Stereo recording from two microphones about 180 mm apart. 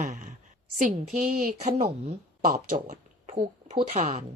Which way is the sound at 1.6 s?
40° right (ahead or behind).